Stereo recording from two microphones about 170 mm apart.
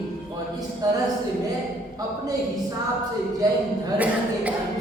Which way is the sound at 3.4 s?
25° right (ahead or behind).